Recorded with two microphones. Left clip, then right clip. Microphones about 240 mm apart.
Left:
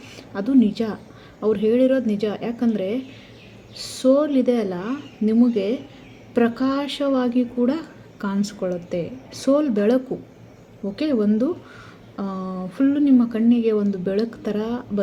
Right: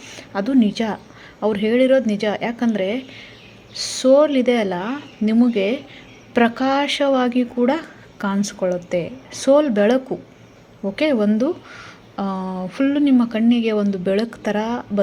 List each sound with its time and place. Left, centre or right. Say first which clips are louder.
0.1 s a woman's voice: right 1 dB; right